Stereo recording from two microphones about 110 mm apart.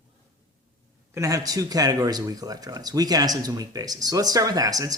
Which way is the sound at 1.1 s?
30° right (ahead or behind).